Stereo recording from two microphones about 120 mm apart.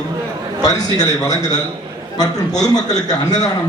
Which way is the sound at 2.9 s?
35° left (ahead or behind).